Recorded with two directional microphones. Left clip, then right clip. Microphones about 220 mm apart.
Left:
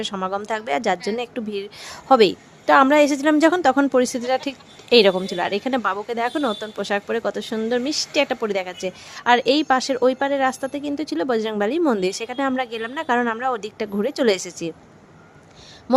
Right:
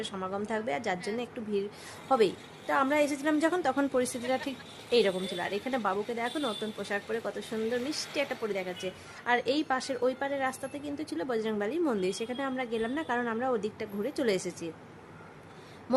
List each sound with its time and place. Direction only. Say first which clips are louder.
0.0 s a woman's voice: left 10 dB; 35° left (ahead or behind)
15.9 s speech: left 11 dB; 25° left (ahead or behind)